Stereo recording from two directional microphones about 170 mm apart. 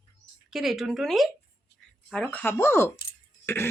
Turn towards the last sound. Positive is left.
turn(degrees=15)  # may be behind; listen again after turning